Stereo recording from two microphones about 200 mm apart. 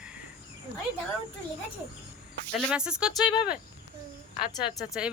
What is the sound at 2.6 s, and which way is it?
Speech, centre (ahead or behind).